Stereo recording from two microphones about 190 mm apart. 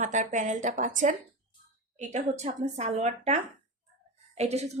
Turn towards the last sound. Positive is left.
turn(degrees=-35)  # may be behind; listen again after turning